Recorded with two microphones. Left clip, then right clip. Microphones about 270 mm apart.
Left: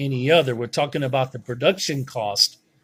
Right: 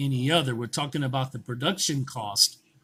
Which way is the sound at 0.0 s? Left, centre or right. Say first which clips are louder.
Left 7 dB; centre.